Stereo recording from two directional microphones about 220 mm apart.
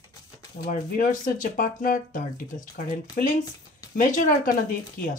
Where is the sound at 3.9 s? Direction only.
35° left (ahead or behind).